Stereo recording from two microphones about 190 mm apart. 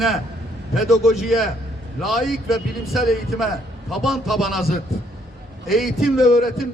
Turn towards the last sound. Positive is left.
turn(degrees=0)  # may be behind; listen again after turning